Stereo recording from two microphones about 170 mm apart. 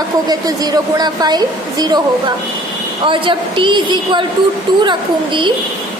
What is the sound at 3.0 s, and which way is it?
A woman's voice, 30° right (ahead or behind).